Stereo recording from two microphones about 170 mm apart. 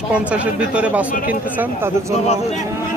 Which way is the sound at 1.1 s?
55° left (ahead or behind).